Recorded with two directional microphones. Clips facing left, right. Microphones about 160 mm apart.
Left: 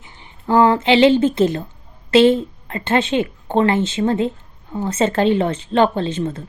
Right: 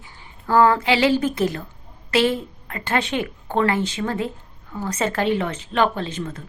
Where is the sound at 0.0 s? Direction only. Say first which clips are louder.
Left 5 dB; 20° left (ahead or behind).